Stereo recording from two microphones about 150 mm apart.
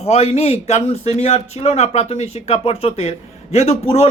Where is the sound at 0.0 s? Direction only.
45° left (ahead or behind).